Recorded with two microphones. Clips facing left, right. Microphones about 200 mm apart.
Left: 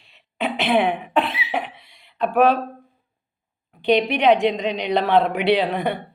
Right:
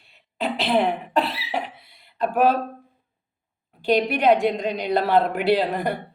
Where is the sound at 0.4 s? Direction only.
Centre (ahead or behind).